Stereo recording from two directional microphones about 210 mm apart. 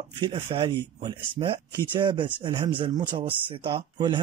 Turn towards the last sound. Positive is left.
turn(degrees=-20)  # may be behind; listen again after turning